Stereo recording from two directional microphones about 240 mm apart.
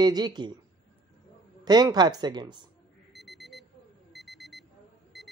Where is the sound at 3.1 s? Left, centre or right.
Centre.